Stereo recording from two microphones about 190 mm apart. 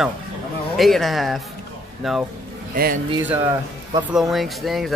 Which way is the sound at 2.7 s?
50° right (ahead or behind).